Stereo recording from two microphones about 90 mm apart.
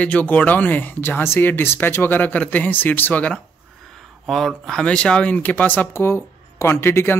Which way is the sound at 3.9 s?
Centre (ahead or behind).